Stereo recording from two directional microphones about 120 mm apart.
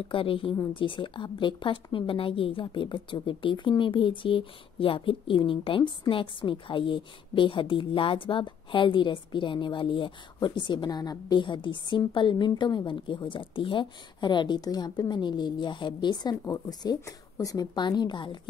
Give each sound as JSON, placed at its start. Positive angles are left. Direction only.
{"t": 0.1, "sound": "a woman's voice", "side_deg": 45}